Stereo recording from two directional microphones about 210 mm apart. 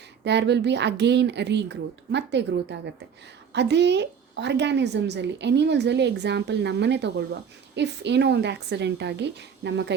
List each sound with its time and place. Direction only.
0.3 s a woman's voice: 55° right (ahead or behind)